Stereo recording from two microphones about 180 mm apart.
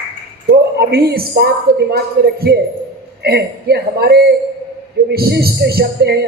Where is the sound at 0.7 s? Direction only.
65° right (ahead or behind).